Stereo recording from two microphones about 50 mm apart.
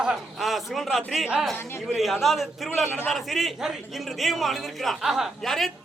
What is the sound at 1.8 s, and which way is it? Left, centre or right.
A man's voice, centre.